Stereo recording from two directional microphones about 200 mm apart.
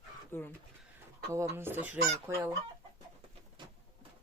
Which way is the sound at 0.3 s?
10° left (ahead or behind).